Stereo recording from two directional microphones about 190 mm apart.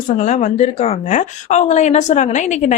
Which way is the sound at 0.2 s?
40° left (ahead or behind).